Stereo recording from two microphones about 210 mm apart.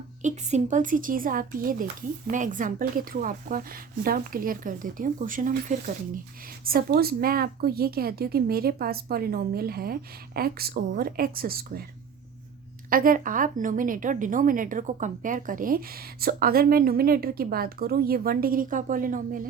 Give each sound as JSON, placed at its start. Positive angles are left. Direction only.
{"t": 0.2, "sound": "a woman's voice", "side_deg": -35}
{"t": 12.9, "sound": "a woman's voice", "side_deg": -40}